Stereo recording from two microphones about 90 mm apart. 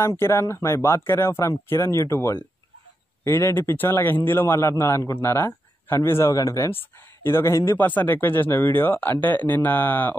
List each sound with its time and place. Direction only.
0.0 s a man's voice: 30° left (ahead or behind)